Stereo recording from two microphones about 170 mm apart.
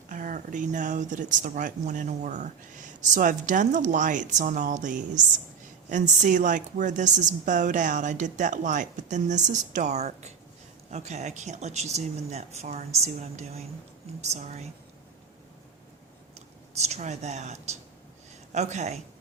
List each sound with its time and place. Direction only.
0.1 s speech: 50° right (ahead or behind)
16.7 s speech: 40° right (ahead or behind)